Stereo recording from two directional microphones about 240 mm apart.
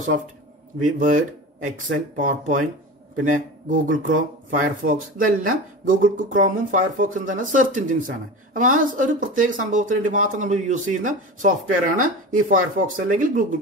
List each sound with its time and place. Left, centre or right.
0.7 s speech: right